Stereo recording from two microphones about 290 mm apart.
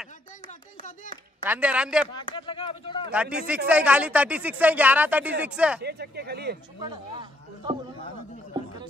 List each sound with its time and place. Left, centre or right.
0.5 s music: left
1.4 s speech: centre
2.1 s speech: centre
3.1 s speech: centre
5.8 s speech: right
6.8 s speech: centre